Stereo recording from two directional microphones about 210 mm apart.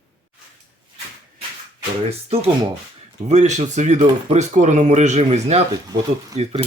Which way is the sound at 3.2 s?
35° right (ahead or behind).